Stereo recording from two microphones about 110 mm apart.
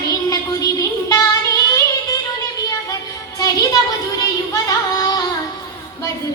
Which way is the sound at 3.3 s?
35° left (ahead or behind).